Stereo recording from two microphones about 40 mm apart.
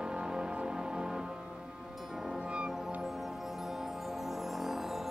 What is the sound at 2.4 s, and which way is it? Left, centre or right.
Music, right.